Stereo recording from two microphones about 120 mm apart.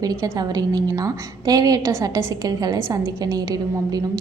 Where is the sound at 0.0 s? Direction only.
30° right (ahead or behind).